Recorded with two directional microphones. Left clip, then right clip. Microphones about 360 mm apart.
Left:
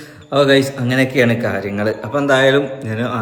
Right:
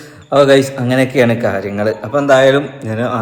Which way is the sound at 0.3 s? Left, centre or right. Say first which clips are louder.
Right 4 dB; centre.